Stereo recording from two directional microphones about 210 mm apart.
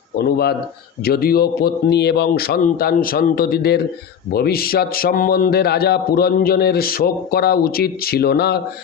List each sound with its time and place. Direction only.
0.2 s a man's voice: 50° left (ahead or behind)